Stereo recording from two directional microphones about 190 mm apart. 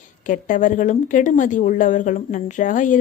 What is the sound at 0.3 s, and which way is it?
A woman's voice, 45° left (ahead or behind).